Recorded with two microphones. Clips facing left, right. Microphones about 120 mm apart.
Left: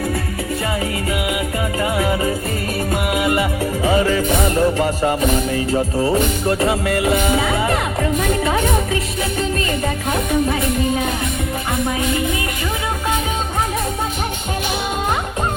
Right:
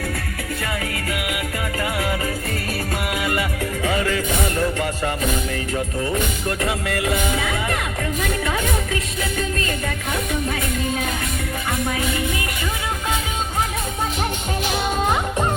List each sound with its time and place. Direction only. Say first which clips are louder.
1.8 s music: left 6 dB; 25° left (ahead or behind)
10.5 s music: left 5 dB; 20° left (ahead or behind)